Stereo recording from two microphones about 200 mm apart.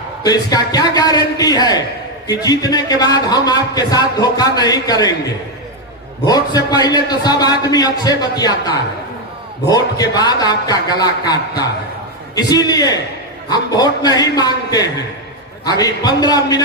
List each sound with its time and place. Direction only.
0.2 s a man's voice: 20° left (ahead or behind)
6.2 s a man's voice: 20° left (ahead or behind)
9.6 s a man's voice: 20° left (ahead or behind)